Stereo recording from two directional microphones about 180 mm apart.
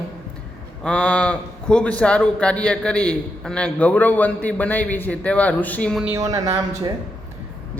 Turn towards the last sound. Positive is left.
turn(degrees=-20)  # may be behind; listen again after turning